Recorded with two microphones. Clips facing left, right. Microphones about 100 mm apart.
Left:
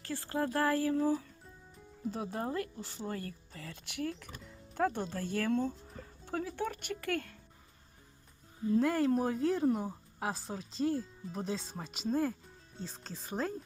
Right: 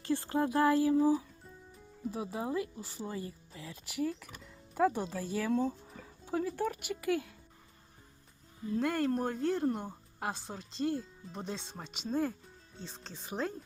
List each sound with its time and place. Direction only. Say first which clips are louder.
0.0 s speech: right 4 dB; 20° right (ahead or behind)
2.0 s speech: even; centre (ahead or behind)
8.7 s speech: left 3 dB; centre (ahead or behind)